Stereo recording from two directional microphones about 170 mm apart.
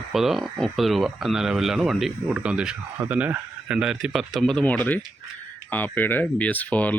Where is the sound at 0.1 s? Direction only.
Centre (ahead or behind).